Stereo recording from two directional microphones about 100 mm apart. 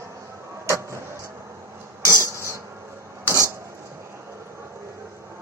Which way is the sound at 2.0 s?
30° right (ahead or behind).